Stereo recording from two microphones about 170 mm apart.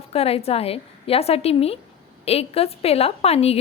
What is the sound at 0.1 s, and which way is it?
A woman's voice, 35° left (ahead or behind).